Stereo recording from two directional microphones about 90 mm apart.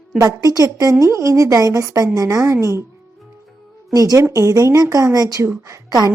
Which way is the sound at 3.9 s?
45° right (ahead or behind).